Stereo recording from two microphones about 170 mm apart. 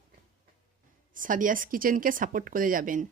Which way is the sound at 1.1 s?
50° right (ahead or behind).